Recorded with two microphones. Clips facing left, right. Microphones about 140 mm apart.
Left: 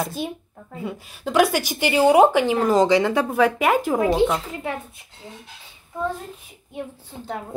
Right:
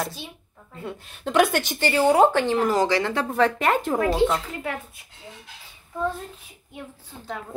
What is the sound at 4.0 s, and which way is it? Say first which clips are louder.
Speech: left 2 dB; 20° left (ahead or behind).